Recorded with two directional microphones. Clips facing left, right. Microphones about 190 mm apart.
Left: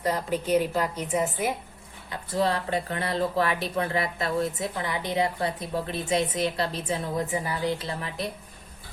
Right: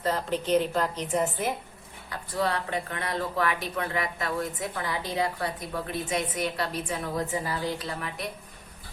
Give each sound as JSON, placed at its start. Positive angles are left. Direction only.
{"t": 0.0, "sound": "a woman's voice", "side_deg": 10}
{"t": 2.0, "sound": "speech", "side_deg": 25}